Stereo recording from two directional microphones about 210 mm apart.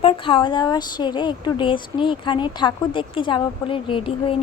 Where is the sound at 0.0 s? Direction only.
25° left (ahead or behind).